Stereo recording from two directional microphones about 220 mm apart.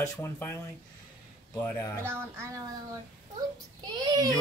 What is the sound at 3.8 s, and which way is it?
Speech, 20° right (ahead or behind).